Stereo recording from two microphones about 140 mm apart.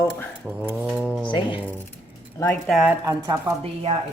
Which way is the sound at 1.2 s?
35° left (ahead or behind).